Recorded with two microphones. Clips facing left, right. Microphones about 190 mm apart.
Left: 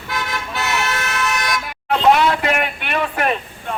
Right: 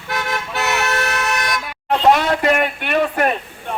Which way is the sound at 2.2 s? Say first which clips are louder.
Right 1 dB; 40° right (ahead or behind).